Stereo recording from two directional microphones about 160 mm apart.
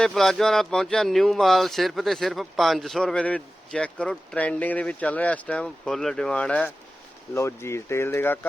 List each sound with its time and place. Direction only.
0.0 s speech: centre (ahead or behind)